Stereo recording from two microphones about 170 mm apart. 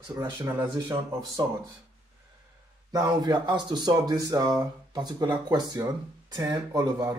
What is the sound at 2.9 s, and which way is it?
Speech, 25° right (ahead or behind).